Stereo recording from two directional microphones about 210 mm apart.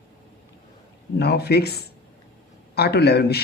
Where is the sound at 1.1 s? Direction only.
50° left (ahead or behind).